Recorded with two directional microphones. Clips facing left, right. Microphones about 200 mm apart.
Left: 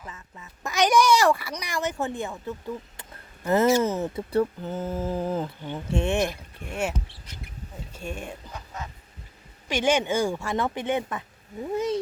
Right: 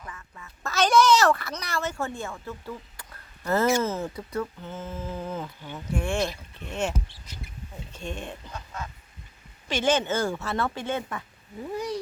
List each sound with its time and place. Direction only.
0.0 s a child's voice: 20° left (ahead or behind)
4.3 s speech: 35° left (ahead or behind)
5.6 s speech: 25° left (ahead or behind); by 6.9 s 10° left (ahead or behind)
7.9 s speech: 10° left (ahead or behind)